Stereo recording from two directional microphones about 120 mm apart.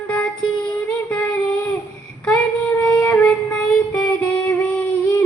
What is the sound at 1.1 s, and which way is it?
Child singing, 10° left (ahead or behind).